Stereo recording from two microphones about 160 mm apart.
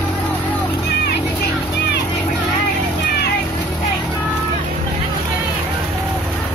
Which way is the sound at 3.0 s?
90° left.